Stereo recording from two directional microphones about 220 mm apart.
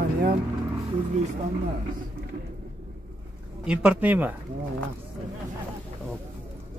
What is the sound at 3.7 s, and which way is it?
Speech, 5° right (ahead or behind).